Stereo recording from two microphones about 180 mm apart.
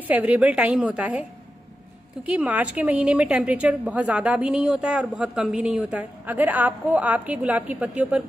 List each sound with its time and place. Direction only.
0.1 s a woman's voice: 10° right (ahead or behind)
2.2 s a woman's voice: 5° right (ahead or behind)